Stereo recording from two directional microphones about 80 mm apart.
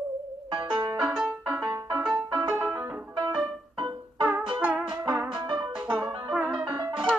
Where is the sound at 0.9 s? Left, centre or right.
Centre.